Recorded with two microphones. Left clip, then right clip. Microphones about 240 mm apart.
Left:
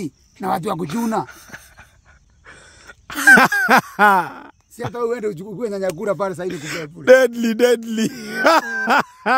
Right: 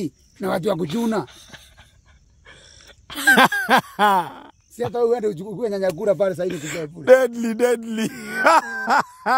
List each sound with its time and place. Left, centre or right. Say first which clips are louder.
0.0 s speech: left 1 dB; centre
2.4 s a sound: left 4 dB; left
5.4 s speech: right 1 dB; centre
6.7 s a man's voice: left 2 dB; left